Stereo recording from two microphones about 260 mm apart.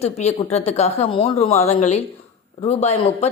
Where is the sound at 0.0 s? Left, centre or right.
Left.